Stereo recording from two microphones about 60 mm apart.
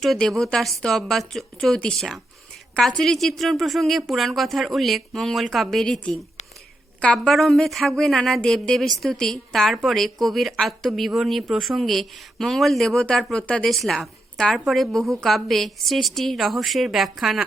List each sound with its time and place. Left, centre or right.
0.0 s a woman's voice: centre
5.8 s a woman's voice: centre
7.3 s a woman's voice: centre
13.7 s a woman's voice: centre